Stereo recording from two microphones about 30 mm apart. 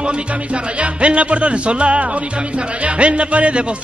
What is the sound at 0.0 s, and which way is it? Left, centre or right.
Music, right.